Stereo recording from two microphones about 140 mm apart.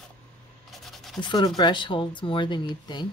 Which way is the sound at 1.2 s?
35° left (ahead or behind).